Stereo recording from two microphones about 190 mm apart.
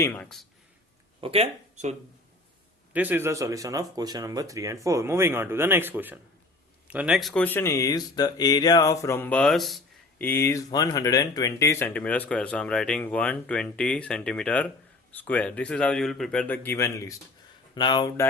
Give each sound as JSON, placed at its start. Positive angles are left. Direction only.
{"t": 0.0, "sound": "speech", "side_deg": 10}
{"t": 1.2, "sound": "speech", "side_deg": -30}
{"t": 2.9, "sound": "speech", "side_deg": -10}